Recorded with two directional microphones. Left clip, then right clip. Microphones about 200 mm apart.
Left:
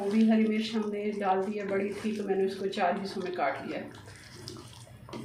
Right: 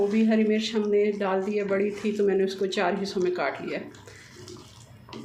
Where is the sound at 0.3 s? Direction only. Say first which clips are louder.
Right 4 dB; 55° right (ahead or behind).